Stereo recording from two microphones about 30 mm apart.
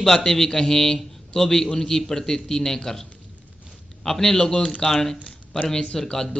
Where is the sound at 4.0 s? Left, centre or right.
Centre.